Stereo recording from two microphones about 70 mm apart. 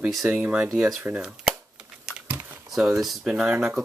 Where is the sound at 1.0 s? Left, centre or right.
Centre.